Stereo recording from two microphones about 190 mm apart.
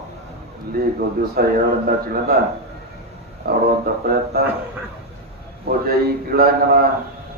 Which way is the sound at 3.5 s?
55° right (ahead or behind).